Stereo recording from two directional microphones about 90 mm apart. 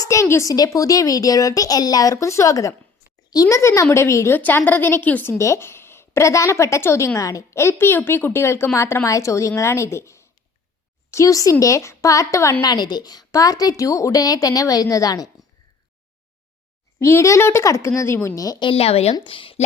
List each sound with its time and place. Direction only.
0.0 s a woman's voice: 35° left (ahead or behind)
0.5 s a woman's voice: 45° left (ahead or behind)
3.6 s a woman's voice: 35° left (ahead or behind)
4.4 s a woman's voice: 20° left (ahead or behind)
5.4 s a woman's voice: 30° left (ahead or behind)
12.6 s a woman's voice: 50° left (ahead or behind)
17.0 s a woman's voice: 30° left (ahead or behind)
18.3 s a woman's voice: 40° left (ahead or behind)
18.6 s speech: 90° left
19.1 s a woman's voice: 70° left (ahead or behind)